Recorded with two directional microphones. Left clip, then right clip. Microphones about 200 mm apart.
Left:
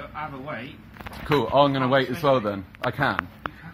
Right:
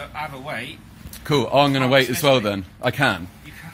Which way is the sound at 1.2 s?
40° right (ahead or behind).